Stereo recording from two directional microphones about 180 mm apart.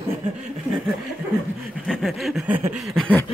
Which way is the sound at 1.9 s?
Centre (ahead or behind).